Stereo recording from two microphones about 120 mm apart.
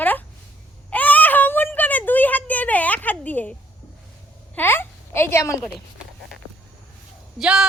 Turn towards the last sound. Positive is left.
turn(degrees=-5)  # may be behind; listen again after turning